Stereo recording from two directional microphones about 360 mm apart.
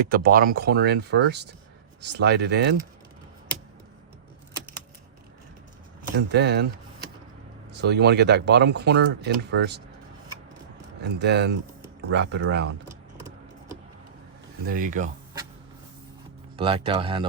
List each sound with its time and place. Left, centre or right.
0.1 s speech: right
6.2 s speech: right
7.8 s speech: right
11.0 s speech: right
14.7 s speech: right
16.6 s speech: centre